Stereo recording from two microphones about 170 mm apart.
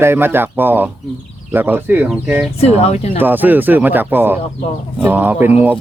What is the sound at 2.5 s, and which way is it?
Speech, 40° left (ahead or behind).